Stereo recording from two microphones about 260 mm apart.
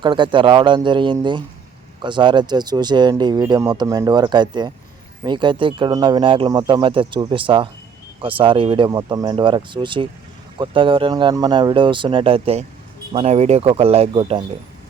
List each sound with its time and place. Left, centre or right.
0.0 s speech: centre